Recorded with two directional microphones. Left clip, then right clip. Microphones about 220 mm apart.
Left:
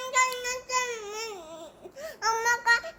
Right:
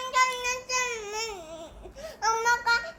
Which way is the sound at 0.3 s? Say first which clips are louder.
Right 1 dB; 5° left (ahead or behind).